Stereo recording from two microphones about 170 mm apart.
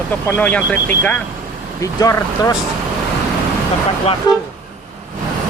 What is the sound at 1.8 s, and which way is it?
Speech, 20° left (ahead or behind).